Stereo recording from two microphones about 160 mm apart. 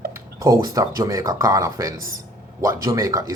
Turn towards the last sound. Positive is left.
turn(degrees=-20)  # may be behind; listen again after turning